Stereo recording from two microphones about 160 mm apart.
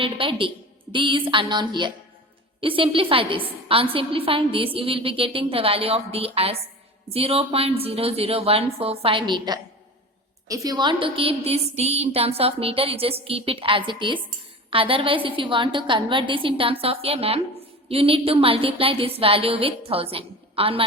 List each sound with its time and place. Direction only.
0.0 s a woman's voice: 35° right (ahead or behind)